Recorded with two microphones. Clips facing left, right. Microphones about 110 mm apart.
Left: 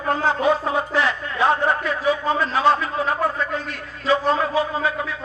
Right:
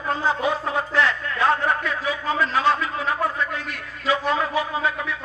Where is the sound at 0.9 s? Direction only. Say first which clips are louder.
Left 1 dB; 15° left (ahead or behind).